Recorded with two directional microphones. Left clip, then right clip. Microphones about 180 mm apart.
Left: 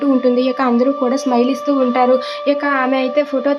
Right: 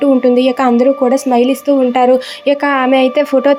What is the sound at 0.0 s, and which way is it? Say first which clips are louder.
A woman's voice: right 5 dB; 25° right (ahead or behind).